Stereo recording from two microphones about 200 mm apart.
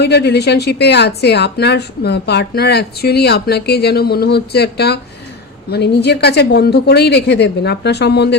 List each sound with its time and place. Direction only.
0.0 s a woman's voice: 55° left (ahead or behind)